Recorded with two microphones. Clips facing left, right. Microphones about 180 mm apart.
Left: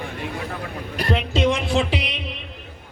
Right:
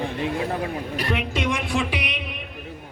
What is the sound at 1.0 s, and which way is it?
Music, 30° left (ahead or behind).